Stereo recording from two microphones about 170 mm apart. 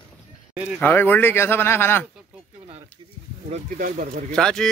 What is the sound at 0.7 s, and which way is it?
Speech, 10° left (ahead or behind).